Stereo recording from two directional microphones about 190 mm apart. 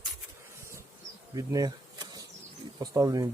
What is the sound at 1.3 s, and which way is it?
Bee, 20° right (ahead or behind).